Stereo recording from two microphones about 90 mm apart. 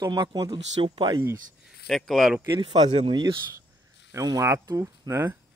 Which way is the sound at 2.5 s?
60° right (ahead or behind).